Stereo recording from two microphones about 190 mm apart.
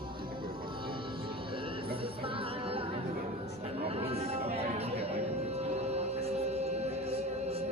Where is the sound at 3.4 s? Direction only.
30° right (ahead or behind).